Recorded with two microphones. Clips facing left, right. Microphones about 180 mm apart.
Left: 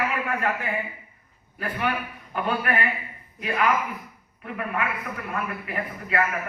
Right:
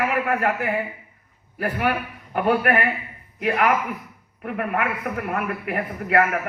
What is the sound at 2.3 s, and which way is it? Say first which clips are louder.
A man's voice: right 6 dB; 65° right (ahead or behind).